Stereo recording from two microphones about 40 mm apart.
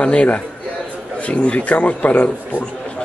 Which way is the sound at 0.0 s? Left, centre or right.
Left.